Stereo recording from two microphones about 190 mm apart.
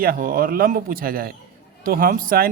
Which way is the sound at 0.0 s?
50° right (ahead or behind).